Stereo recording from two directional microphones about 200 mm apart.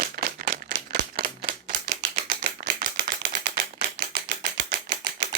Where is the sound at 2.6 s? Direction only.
45° right (ahead or behind).